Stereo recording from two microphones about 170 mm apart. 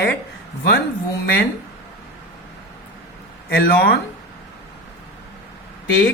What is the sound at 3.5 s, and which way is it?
Speech, 65° left (ahead or behind).